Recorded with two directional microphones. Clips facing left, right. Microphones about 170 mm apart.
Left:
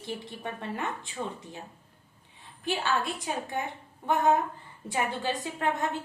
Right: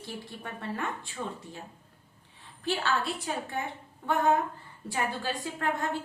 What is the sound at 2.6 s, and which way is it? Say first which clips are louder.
A woman's voice: even; 15° left (ahead or behind).